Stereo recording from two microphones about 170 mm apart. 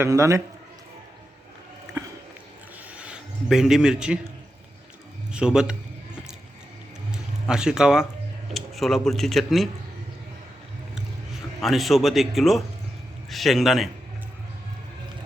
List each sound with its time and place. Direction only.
0.0 s a man's voice: 15° right (ahead or behind)
2.9 s filing: 5° right (ahead or behind)
5.3 s speech: 5° right (ahead or behind)
7.1 s a sound: 5° right (ahead or behind)
8.5 s speech: centre (ahead or behind)
11.6 s speech: centre (ahead or behind)